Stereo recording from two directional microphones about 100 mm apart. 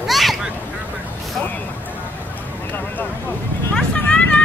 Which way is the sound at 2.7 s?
20° left (ahead or behind).